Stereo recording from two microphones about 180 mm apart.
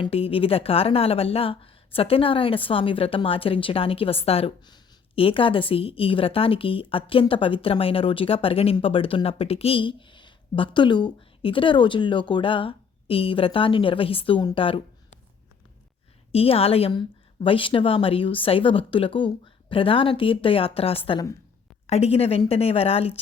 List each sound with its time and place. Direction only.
0.0 s a woman's voice: 30° left (ahead or behind)
16.3 s a woman's voice: 35° left (ahead or behind)